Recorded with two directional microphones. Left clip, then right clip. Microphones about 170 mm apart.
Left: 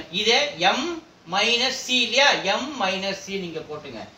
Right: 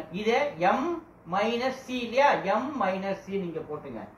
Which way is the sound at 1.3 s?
25° left (ahead or behind).